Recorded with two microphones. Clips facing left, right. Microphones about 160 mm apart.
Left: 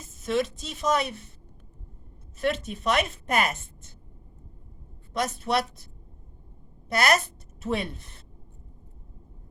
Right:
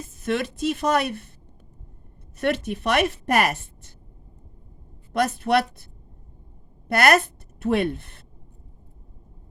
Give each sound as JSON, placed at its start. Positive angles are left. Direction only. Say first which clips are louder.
{"t": 0.0, "sound": "a woman's voice", "louder": "right 1 dB", "side_deg": -60}
{"t": 2.4, "sound": "a woman's voice", "louder": "right 3 dB", "side_deg": -65}
{"t": 5.1, "sound": "a woman's voice", "louder": "right 5 dB", "side_deg": -60}